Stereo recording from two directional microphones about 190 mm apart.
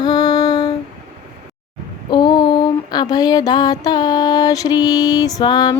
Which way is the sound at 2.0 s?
25° left (ahead or behind).